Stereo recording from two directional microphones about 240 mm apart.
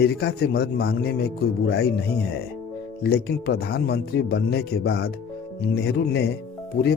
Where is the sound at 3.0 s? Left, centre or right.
Left.